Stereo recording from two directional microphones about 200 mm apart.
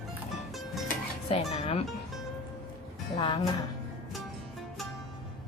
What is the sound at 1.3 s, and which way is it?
Speech, 30° left (ahead or behind).